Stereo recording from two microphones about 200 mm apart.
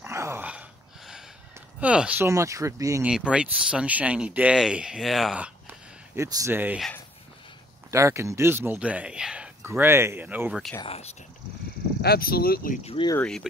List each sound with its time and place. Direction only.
0.0 s a sound: 15° right (ahead or behind)
1.8 s speech: 5° right (ahead or behind)
3.1 s speech: 5° right (ahead or behind)
7.9 s speech: 15° right (ahead or behind)
10.8 s speech: 30° left (ahead or behind)
12.0 s speech: 50° left (ahead or behind)
12.8 s speech: 25° left (ahead or behind)
13.1 s speech: 5° left (ahead or behind)